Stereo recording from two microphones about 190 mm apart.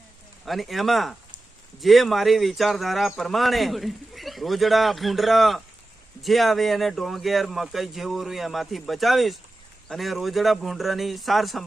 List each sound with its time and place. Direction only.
0.4 s speech: centre (ahead or behind)